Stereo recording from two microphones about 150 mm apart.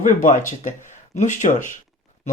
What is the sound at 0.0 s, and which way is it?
Speech, 60° left (ahead or behind).